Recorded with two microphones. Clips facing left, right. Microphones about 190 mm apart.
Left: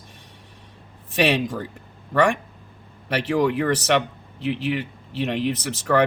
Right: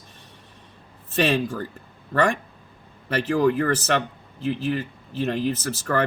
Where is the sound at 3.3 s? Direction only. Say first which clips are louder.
Even; 70° left (ahead or behind).